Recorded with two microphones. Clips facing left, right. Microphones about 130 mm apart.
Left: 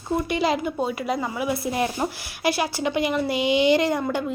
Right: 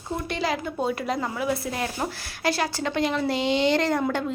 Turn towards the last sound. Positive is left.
turn(degrees=5)  # may be behind; listen again after turning